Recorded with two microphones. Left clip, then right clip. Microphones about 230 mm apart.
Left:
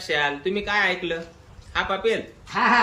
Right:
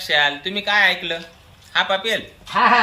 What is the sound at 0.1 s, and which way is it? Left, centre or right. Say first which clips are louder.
Speech: right 5 dB; centre.